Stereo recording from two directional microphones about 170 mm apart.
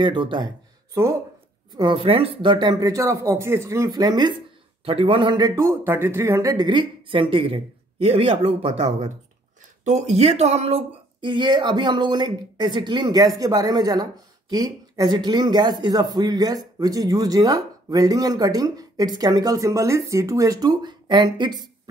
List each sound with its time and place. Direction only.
0.0 s speech: 25° right (ahead or behind)
1.8 s speech: 30° right (ahead or behind)